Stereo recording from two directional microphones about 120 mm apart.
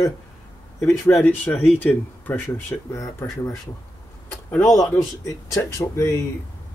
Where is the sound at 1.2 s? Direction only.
15° left (ahead or behind).